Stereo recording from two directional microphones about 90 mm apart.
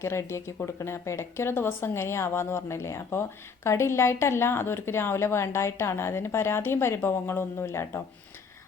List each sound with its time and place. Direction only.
0.0 s speech: 30° left (ahead or behind)